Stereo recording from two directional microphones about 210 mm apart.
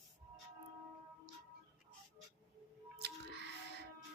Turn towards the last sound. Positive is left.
turn(degrees=-50)  # may be behind; listen again after turning